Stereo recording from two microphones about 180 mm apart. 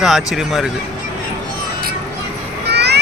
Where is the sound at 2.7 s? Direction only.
65° right (ahead or behind).